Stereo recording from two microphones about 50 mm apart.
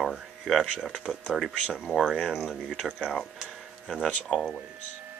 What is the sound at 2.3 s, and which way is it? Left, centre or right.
Speech, centre.